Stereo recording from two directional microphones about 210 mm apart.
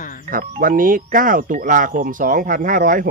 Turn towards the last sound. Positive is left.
turn(degrees=-40)  # may be behind; listen again after turning